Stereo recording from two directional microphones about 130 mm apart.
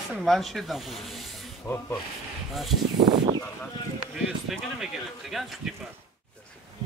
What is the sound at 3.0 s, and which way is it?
Speech, 40° right (ahead or behind).